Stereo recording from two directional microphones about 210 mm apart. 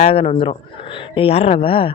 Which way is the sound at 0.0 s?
25° left (ahead or behind).